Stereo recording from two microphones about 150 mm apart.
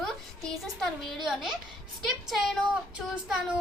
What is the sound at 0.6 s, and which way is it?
Speech, centre (ahead or behind).